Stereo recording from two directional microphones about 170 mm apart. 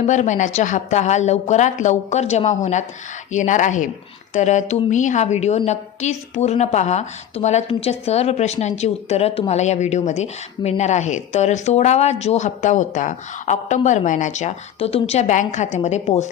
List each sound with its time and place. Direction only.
0.0 s a woman's voice: 45° left (ahead or behind)